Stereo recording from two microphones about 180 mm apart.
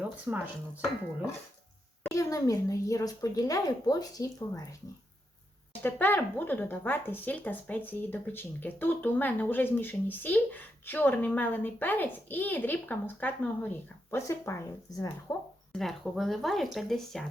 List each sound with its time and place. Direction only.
0.3 s speech: 10° right (ahead or behind)
2.1 s a child's voice: 20° left (ahead or behind)
5.8 s speech: 10° left (ahead or behind)
15.7 s speech: centre (ahead or behind)